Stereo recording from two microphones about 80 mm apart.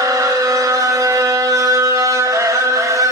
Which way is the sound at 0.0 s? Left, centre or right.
Right.